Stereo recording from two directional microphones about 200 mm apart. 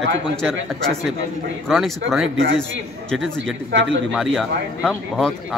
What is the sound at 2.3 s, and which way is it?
Speech, 65° right (ahead or behind).